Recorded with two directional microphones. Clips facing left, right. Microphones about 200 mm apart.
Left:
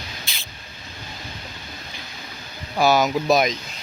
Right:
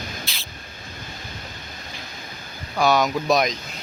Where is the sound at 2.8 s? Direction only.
5° left (ahead or behind).